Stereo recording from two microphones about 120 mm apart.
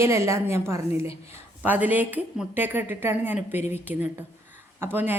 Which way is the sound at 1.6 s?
15° right (ahead or behind).